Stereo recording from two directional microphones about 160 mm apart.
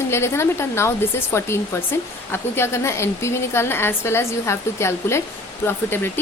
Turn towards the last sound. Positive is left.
turn(degrees=15)  # may be behind; listen again after turning